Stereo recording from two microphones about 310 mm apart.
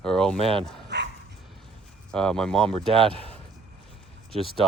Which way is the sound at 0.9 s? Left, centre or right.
Right.